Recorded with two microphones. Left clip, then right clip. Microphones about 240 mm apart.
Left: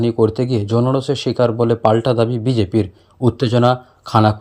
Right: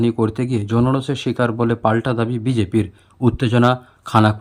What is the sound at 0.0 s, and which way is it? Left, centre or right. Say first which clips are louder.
Speech: left 4 dB; right.